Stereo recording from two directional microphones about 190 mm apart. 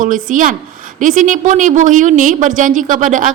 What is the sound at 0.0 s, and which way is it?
A woman's voice, 45° right (ahead or behind).